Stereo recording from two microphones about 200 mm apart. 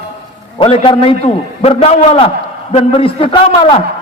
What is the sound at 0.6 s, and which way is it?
A man's voice, 30° left (ahead or behind).